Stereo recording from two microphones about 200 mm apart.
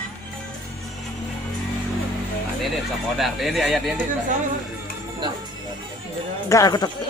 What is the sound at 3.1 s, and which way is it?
Speech, centre (ahead or behind).